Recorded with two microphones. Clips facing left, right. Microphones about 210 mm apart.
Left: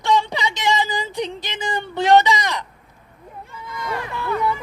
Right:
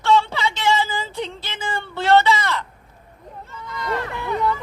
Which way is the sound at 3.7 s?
15° left (ahead or behind).